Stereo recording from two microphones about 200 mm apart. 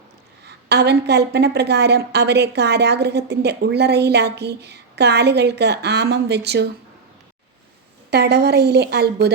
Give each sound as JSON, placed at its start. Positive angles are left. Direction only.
{"t": 0.4, "sound": "a woman's voice", "side_deg": -55}
{"t": 8.1, "sound": "a woman's voice", "side_deg": -55}